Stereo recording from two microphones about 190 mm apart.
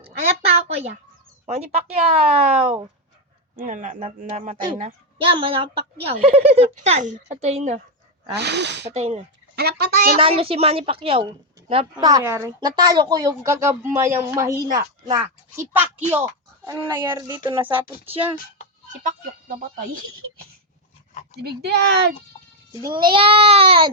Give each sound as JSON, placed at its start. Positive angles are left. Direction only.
{"t": 0.0, "sound": "a sound", "side_deg": -30}
{"t": 1.5, "sound": "a woman's voice", "side_deg": -35}
{"t": 8.4, "sound": "speech", "side_deg": -65}
{"t": 8.9, "sound": "a woman's voice", "side_deg": -35}
{"t": 9.6, "sound": "speech", "side_deg": -60}
{"t": 10.2, "sound": "a woman's voice", "side_deg": -30}
{"t": 15.7, "sound": "a woman's voice", "side_deg": -10}
{"t": 21.4, "sound": "speech", "side_deg": -60}
{"t": 22.8, "sound": "a woman's voice", "side_deg": -25}